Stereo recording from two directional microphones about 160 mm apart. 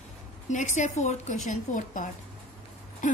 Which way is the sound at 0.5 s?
50° left (ahead or behind).